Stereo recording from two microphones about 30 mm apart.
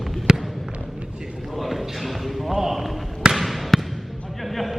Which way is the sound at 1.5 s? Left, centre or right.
Centre.